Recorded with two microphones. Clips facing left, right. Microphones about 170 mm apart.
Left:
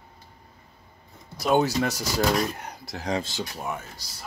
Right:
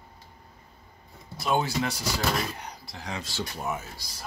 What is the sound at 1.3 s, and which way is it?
Speech, 40° left (ahead or behind).